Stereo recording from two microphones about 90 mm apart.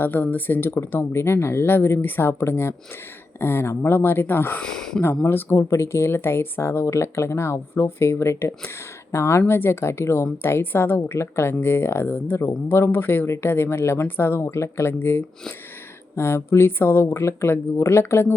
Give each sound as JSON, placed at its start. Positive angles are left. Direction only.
{"t": 0.0, "sound": "speech", "side_deg": 20}
{"t": 4.6, "sound": "speech", "side_deg": 5}
{"t": 5.2, "sound": "speech", "side_deg": 25}